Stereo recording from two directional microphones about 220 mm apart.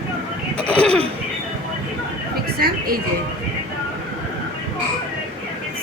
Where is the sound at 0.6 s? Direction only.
5° left (ahead or behind).